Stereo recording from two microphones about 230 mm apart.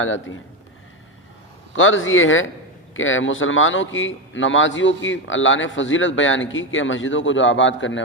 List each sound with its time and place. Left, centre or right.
0.0 s a man's voice: left
1.7 s a man's voice: left